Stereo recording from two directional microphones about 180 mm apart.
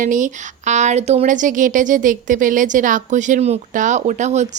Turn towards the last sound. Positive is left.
turn(degrees=-40)  # may be behind; listen again after turning